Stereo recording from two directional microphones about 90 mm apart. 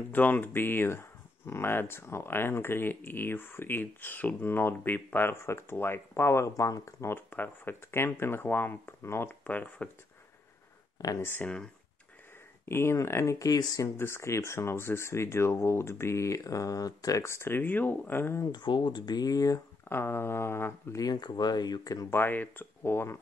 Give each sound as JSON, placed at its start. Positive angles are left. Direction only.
{"t": 0.1, "sound": "speech", "side_deg": 20}
{"t": 9.3, "sound": "speech", "side_deg": 15}
{"t": 11.0, "sound": "speech", "side_deg": 40}
{"t": 12.6, "sound": "speech", "side_deg": 30}
{"t": 13.9, "sound": "speech", "side_deg": 30}
{"t": 18.5, "sound": "speech", "side_deg": 55}
{"t": 19.9, "sound": "speech", "side_deg": 25}
{"t": 21.0, "sound": "speech", "side_deg": 50}
{"t": 22.1, "sound": "speech", "side_deg": 25}